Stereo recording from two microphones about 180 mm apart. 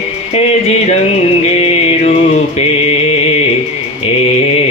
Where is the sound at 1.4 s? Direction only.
35° left (ahead or behind).